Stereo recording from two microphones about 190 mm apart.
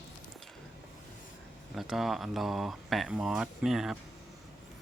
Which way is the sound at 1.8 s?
Centre (ahead or behind).